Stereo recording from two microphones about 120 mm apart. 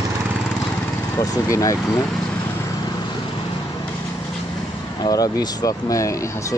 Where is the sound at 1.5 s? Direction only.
30° left (ahead or behind).